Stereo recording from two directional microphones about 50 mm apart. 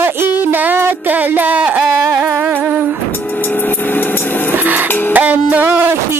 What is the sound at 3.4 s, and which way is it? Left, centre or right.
Vehicle, left.